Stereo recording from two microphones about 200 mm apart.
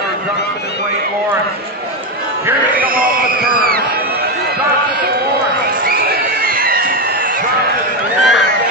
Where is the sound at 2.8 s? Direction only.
45° right (ahead or behind).